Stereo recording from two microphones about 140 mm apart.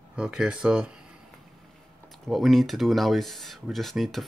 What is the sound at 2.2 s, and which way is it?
Speech, centre (ahead or behind).